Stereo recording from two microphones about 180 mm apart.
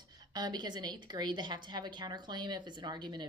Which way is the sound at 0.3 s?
25° right (ahead or behind).